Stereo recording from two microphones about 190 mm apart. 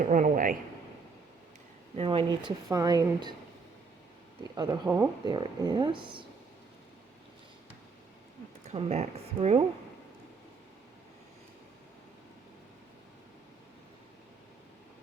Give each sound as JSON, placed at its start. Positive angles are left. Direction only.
{"t": 0.0, "sound": "a man's voice", "side_deg": -40}
{"t": 2.0, "sound": "speech", "side_deg": -25}
{"t": 4.5, "sound": "speech", "side_deg": -20}
{"t": 8.7, "sound": "speech", "side_deg": -35}